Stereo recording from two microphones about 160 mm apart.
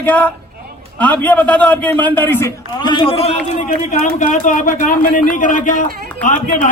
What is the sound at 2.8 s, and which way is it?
A man's voice, 30° left (ahead or behind).